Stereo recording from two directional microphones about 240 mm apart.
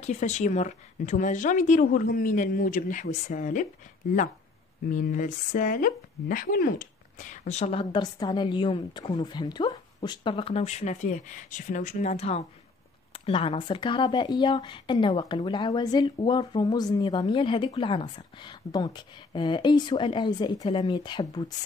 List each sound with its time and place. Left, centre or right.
0.0 s speech: left
4.9 s speech: left